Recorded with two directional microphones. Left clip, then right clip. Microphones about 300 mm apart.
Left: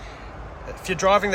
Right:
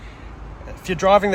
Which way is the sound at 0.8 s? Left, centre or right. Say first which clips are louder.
Right 3 dB; centre.